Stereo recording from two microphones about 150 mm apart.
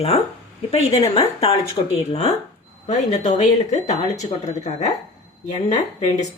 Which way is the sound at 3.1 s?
50° left (ahead or behind).